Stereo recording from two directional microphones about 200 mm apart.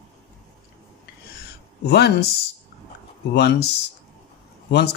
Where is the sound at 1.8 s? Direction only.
60° left (ahead or behind).